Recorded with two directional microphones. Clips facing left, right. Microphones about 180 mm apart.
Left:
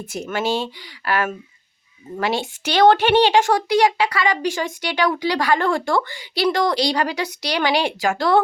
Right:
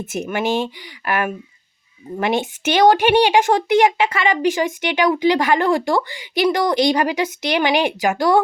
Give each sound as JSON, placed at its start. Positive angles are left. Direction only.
{"t": 0.0, "sound": "speech", "side_deg": -20}